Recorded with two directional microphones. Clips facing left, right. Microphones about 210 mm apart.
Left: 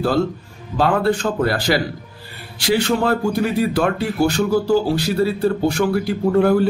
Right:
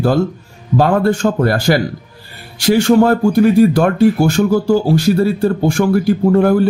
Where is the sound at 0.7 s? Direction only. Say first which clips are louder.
Right 4 dB; 45° right (ahead or behind).